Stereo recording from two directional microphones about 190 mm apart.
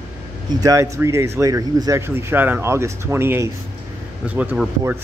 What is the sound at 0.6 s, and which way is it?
Speech, 15° right (ahead or behind).